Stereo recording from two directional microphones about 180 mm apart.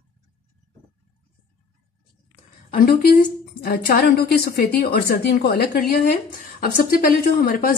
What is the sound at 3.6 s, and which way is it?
A woman's voice, 60° left (ahead or behind).